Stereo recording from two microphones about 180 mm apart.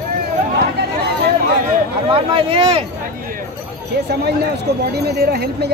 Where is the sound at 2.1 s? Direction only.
30° right (ahead or behind).